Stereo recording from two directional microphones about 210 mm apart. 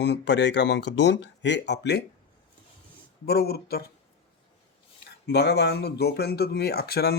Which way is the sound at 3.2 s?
50° left (ahead or behind).